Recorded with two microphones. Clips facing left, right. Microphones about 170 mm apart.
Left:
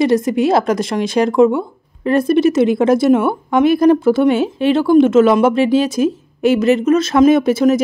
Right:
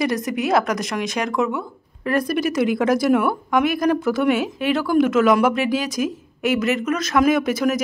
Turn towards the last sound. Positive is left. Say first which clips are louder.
# left 7 dB
turn(degrees=30)  # may be behind; listen again after turning